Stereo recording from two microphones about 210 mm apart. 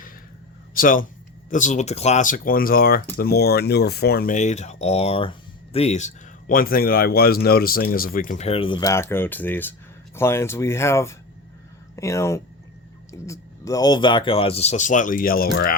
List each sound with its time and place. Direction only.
0.7 s a man's voice: 40° left (ahead or behind)